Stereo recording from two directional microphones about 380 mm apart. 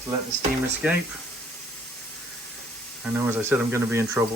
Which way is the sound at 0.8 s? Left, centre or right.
Centre.